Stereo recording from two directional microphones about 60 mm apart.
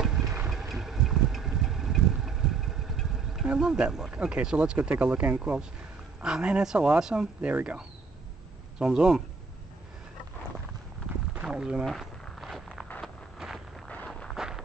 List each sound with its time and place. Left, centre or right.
0.0 s vehicle: centre
3.5 s speech: centre
4.7 s speech: right
6.2 s speech: centre
7.4 s speech: right
11.5 s speech: centre
11.8 s walk: centre
14.3 s a sound: centre